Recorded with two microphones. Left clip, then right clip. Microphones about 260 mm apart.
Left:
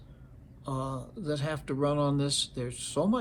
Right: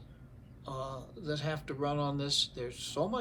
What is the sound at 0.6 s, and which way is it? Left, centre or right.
Speech, left.